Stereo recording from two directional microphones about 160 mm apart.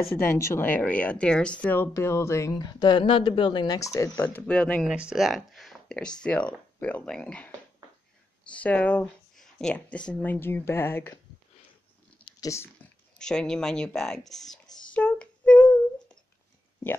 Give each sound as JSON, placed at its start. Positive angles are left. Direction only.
{"t": 0.3, "sound": "speech", "side_deg": 15}
{"t": 4.8, "sound": "speech", "side_deg": -5}
{"t": 12.3, "sound": "a sound", "side_deg": 20}
{"t": 13.2, "sound": "speech", "side_deg": 5}
{"t": 15.0, "sound": "humming", "side_deg": 10}